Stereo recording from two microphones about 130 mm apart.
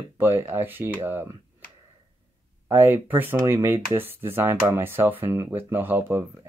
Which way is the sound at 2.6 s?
15° right (ahead or behind).